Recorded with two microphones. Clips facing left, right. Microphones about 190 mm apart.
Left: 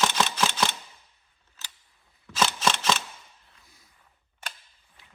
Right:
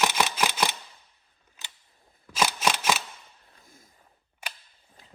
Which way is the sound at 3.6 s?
50° right (ahead or behind).